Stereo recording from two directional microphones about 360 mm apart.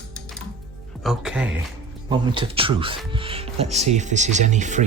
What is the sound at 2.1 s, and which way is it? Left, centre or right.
Speech, centre.